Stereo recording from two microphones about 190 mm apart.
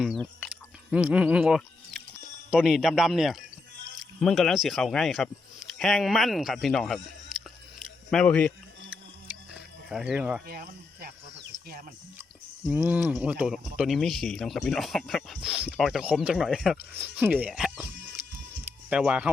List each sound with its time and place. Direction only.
0.0 s speech: centre (ahead or behind)
9.5 s music: 5° right (ahead or behind)
10.4 s speech: 55° right (ahead or behind)
12.6 s speech: 5° right (ahead or behind)
18.9 s speech: 5° right (ahead or behind)